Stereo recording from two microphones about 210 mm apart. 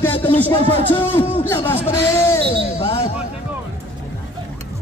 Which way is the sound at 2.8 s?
25° left (ahead or behind).